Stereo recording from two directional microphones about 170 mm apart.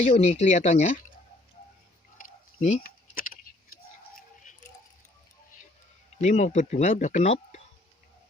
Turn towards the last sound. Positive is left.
turn(degrees=45)  # may be behind; listen again after turning